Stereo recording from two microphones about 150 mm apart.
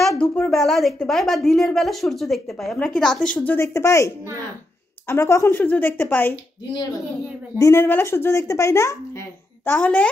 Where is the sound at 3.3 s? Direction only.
15° left (ahead or behind).